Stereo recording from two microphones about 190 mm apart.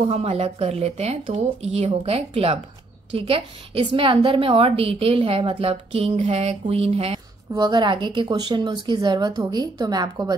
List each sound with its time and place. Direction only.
0.0 s a woman's voice: 30° right (ahead or behind)